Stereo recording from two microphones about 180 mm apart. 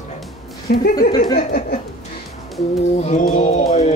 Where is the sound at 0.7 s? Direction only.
50° left (ahead or behind).